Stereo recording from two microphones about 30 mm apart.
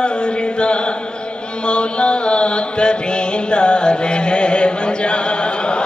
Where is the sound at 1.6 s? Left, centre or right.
Left.